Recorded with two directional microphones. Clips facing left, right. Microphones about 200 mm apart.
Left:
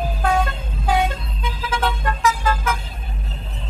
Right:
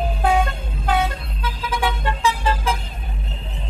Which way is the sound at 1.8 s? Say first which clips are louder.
Even; 20° right (ahead or behind).